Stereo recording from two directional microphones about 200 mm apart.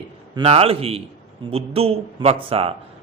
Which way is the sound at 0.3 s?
30° right (ahead or behind).